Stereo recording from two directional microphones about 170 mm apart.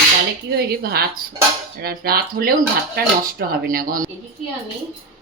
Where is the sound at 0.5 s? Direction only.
65° right (ahead or behind).